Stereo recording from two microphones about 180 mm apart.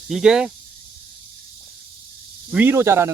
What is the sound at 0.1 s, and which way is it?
Speech, 5° right (ahead or behind).